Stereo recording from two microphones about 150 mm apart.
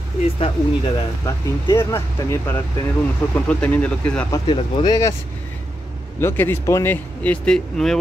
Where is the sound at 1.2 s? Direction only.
20° left (ahead or behind).